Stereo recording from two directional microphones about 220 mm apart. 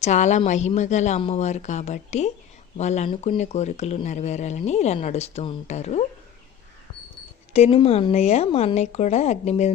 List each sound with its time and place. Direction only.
0.0 s speech: 30° left (ahead or behind)
7.5 s speech: 25° left (ahead or behind)